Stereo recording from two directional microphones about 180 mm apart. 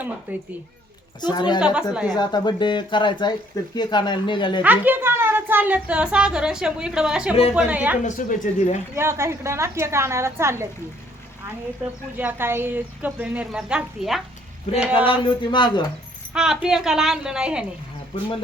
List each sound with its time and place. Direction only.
0.3 s a woman's voice: 10° right (ahead or behind)
1.2 s speech: 25° left (ahead or behind)
1.6 s a woman's voice: 5° right (ahead or behind)
2.0 s speech: 25° left (ahead or behind)
4.6 s a woman's voice: 10° right (ahead or behind)
8.0 s speech: 40° left (ahead or behind)
9.0 s a woman's voice: 15° right (ahead or behind)
12.1 s a woman's voice: 10° right (ahead or behind)
15.0 s speech: 25° left (ahead or behind)
16.3 s a woman's voice: 5° right (ahead or behind)